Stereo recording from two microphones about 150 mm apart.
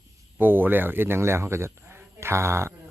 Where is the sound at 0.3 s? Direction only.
10° right (ahead or behind).